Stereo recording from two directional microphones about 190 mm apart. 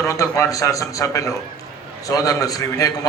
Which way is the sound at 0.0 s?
15° left (ahead or behind).